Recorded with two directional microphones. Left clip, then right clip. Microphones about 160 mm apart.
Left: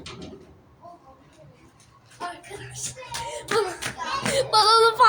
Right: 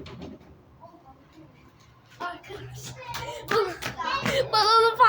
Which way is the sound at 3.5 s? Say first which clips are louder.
Left 1 dB; 20° right (ahead or behind).